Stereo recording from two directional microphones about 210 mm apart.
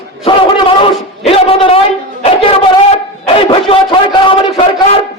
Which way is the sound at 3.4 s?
25° left (ahead or behind).